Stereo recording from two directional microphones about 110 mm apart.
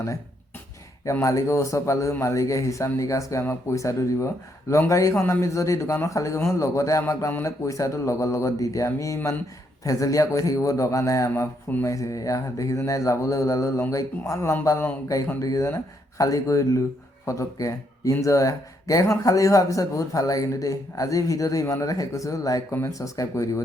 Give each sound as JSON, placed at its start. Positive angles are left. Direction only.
{"t": 1.2, "sound": "a man's voice", "side_deg": 30}